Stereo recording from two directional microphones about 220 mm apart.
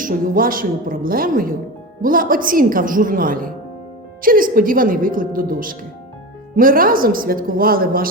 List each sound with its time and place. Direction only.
0.0 s speech: 40° right (ahead or behind)